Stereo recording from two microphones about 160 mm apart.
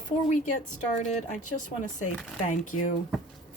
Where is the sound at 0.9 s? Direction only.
45° left (ahead or behind).